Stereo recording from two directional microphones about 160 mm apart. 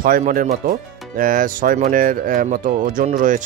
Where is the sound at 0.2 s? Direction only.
50° right (ahead or behind).